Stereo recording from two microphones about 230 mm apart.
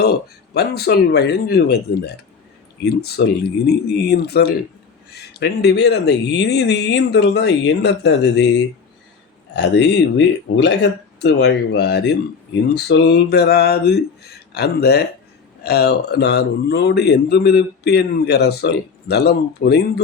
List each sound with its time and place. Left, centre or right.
0.0 s a man's voice: left